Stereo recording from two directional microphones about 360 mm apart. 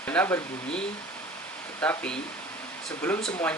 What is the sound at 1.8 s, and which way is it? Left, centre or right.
Speech, centre.